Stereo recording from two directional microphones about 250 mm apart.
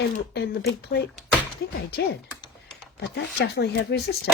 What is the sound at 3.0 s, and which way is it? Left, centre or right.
Speech, left.